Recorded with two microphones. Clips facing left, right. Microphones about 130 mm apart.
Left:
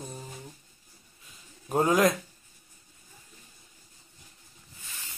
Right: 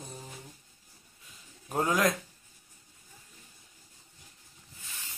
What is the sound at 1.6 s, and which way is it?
Speech, 10° left (ahead or behind).